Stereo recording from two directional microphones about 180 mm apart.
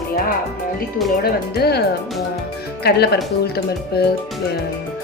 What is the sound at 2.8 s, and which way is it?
Speech, 65° left (ahead or behind).